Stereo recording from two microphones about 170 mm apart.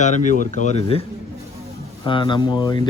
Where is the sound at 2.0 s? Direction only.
30° left (ahead or behind).